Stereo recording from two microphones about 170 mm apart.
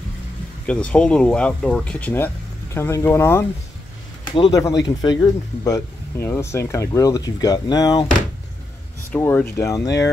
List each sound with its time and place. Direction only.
0.7 s speech: 5° left (ahead or behind); by 8.1 s 25° left (ahead or behind)
9.1 s speech: 10° left (ahead or behind)